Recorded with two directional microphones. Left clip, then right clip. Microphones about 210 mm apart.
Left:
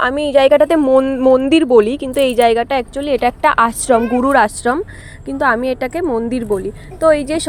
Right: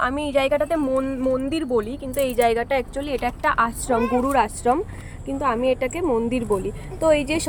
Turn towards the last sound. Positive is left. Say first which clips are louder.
# left 6 dB
turn(degrees=15)  # may be behind; listen again after turning